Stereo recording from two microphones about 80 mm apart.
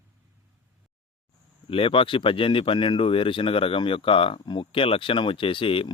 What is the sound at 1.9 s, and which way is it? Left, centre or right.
Speech, left.